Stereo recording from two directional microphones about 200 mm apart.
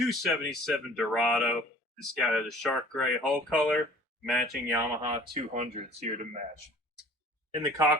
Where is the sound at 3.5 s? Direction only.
5° left (ahead or behind).